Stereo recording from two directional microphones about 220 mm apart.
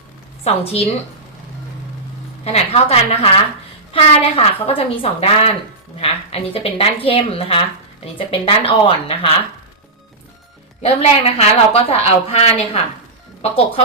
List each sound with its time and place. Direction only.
0.4 s a woman's voice: 25° left (ahead or behind)
2.4 s a woman's voice: 30° left (ahead or behind)
10.8 s a woman's voice: 30° left (ahead or behind)